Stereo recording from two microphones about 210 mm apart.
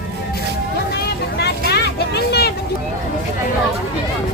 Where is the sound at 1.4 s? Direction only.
50° left (ahead or behind).